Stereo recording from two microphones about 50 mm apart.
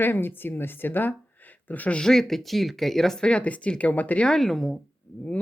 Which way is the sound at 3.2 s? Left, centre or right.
Left.